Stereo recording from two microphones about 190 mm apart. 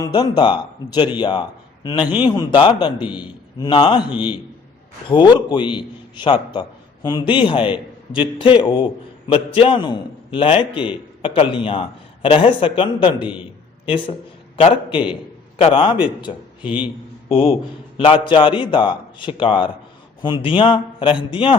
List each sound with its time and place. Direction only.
0.0 s a man's voice: 20° left (ahead or behind)
3.0 s a man's voice: 5° right (ahead or behind)
3.6 s a man's voice: 25° left (ahead or behind)
4.1 s a man's voice: 10° right (ahead or behind)
5.0 s a man's voice: 25° left (ahead or behind)
14.8 s a man's voice: 5° right (ahead or behind)
15.5 s a man's voice: 30° left (ahead or behind)
16.6 s a man's voice: 5° right (ahead or behind)
17.2 s a man's voice: 30° left (ahead or behind)